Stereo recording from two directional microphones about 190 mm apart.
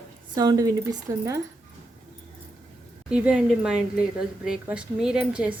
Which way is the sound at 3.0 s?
5° right (ahead or behind).